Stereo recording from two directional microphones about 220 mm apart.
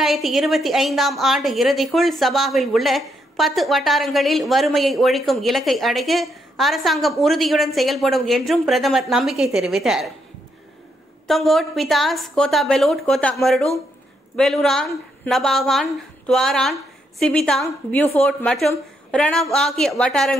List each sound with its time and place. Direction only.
0.0 s a woman's voice: centre (ahead or behind)
11.2 s a woman's voice: centre (ahead or behind)